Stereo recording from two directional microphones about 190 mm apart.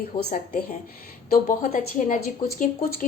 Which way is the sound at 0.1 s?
25° left (ahead or behind).